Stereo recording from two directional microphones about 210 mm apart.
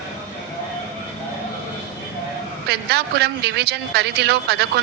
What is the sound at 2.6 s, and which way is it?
A man's voice, 50° right (ahead or behind).